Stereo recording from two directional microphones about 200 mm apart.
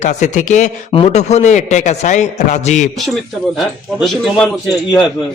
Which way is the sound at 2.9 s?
Centre (ahead or behind).